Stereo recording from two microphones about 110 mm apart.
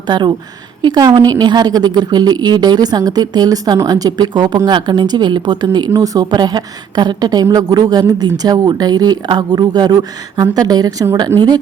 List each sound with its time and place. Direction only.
0.1 s a woman's voice: 45° right (ahead or behind)